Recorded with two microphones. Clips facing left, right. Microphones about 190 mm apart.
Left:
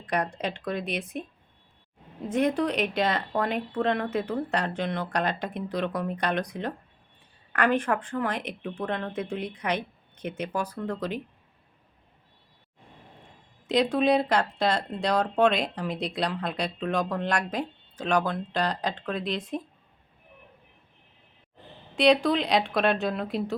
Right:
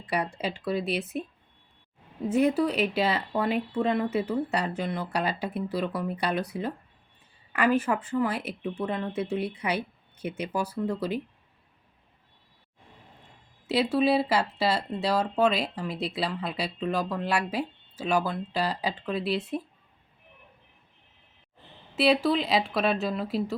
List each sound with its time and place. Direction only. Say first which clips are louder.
0.0 s speech: left 1 dB; 5° right (ahead or behind)
2.2 s speech: right 2 dB; 5° right (ahead or behind)
13.7 s speech: left 1 dB; 5° right (ahead or behind)
21.9 s speech: left 2 dB; 5° right (ahead or behind)